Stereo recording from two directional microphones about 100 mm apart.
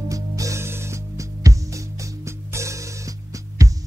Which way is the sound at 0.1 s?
35° right (ahead or behind).